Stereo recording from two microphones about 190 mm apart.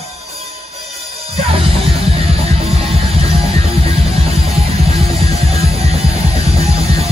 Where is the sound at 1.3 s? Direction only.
30° right (ahead or behind).